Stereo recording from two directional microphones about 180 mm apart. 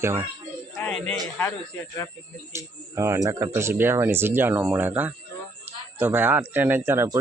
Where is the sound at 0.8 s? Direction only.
5° left (ahead or behind).